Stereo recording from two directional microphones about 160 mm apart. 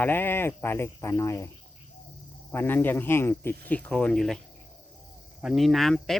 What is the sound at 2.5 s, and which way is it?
Speech, 15° left (ahead or behind).